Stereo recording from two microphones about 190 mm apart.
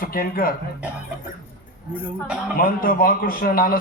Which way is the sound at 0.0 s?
50° left (ahead or behind).